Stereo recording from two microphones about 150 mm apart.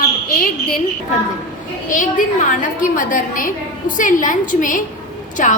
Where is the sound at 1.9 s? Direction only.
60° left (ahead or behind).